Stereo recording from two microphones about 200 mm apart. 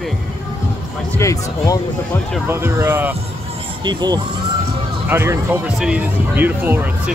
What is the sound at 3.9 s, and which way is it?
Speech, 20° right (ahead or behind).